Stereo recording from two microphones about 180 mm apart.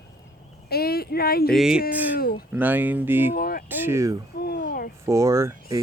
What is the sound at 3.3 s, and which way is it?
Speech, 55° left (ahead or behind).